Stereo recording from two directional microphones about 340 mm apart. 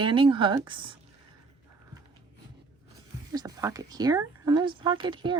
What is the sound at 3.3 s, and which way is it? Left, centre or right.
Speech, centre.